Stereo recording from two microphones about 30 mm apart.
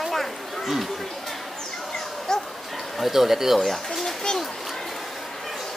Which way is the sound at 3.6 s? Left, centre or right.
Centre.